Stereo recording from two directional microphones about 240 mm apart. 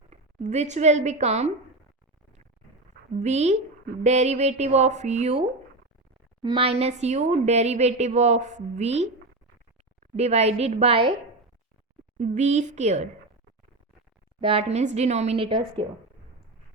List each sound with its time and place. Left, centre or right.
0.1 s speech: right
3.2 s speech: right
10.2 s speech: right
12.1 s speech: right
14.4 s speech: right